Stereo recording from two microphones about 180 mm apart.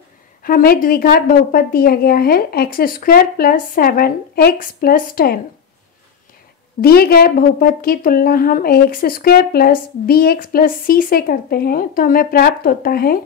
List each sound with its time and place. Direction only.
0.4 s a woman's voice: 55° left (ahead or behind)
6.8 s a woman's voice: 55° left (ahead or behind)